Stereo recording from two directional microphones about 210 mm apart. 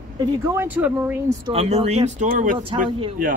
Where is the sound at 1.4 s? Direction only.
30° right (ahead or behind).